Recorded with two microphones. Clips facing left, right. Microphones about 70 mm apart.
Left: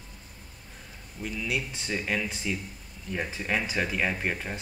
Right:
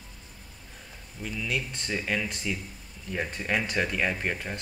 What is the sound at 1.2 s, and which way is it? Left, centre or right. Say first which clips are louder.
Speech: even; centre.